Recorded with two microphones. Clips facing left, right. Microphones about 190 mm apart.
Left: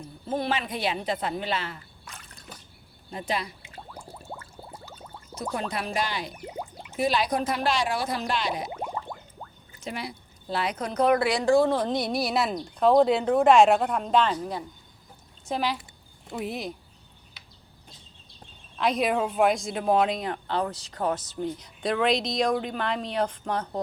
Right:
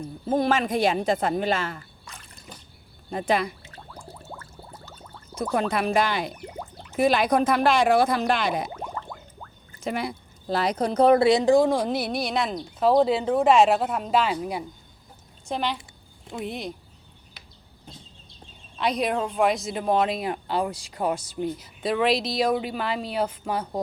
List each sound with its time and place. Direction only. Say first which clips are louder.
0.3 s speech: right 6 dB; 45° right (ahead or behind)
3.1 s speech: right 6 dB; 55° right (ahead or behind)
3.6 s a sound: left 1 dB; 10° left (ahead or behind)
5.4 s speech: right 6 dB; 55° right (ahead or behind)
8.7 s a sound: left 1 dB; 15° left (ahead or behind)
9.8 s speech: right 6 dB; 55° right (ahead or behind); by 14.6 s 10° right (ahead or behind)
15.4 s speech: even; centre (ahead or behind)
18.8 s speech: even; centre (ahead or behind)